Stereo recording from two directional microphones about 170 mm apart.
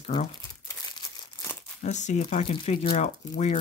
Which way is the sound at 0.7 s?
20° left (ahead or behind).